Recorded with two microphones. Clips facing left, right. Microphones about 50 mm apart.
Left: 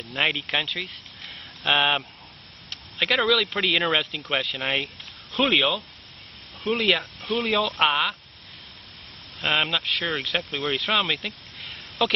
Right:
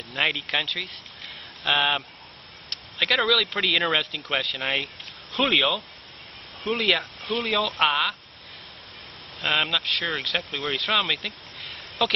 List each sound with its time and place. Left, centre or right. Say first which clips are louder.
0.1 s speech: left 1 dB; centre
9.4 s speech: left 1 dB; centre